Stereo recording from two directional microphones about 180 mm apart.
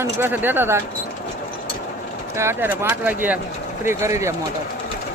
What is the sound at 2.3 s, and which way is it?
Speech, 15° right (ahead or behind).